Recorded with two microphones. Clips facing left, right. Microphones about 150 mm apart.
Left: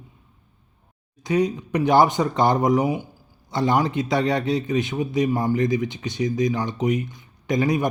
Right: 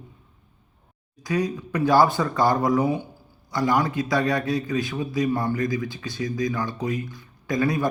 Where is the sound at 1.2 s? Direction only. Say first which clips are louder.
Left 4 dB; 20° left (ahead or behind).